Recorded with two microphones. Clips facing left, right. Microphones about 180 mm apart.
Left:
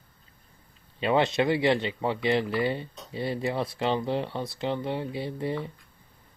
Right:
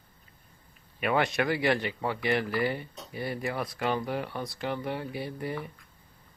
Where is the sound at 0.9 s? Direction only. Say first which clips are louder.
Left 3 dB; 25° left (ahead or behind).